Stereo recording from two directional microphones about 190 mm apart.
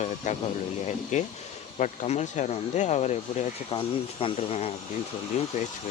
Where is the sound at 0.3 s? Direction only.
40° left (ahead or behind).